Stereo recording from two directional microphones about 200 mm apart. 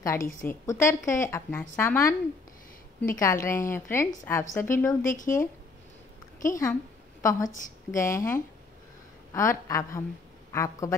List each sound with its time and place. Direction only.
0.0 s a woman's voice: 15° left (ahead or behind)
3.2 s a woman's voice: 15° left (ahead or behind)
5.0 s speech: 40° left (ahead or behind)
6.4 s a woman's voice: 15° left (ahead or behind)